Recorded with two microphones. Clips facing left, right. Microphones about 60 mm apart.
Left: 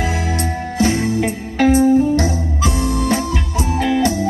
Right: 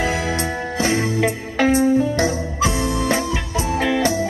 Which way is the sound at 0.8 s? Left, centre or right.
Right.